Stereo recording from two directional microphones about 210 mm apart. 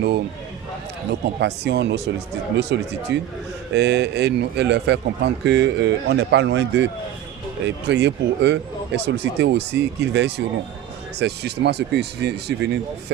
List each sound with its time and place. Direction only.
1.2 s a man's voice: 55° right (ahead or behind)